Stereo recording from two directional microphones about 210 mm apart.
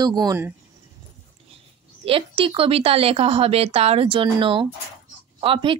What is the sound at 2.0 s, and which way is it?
Speech, 25° right (ahead or behind).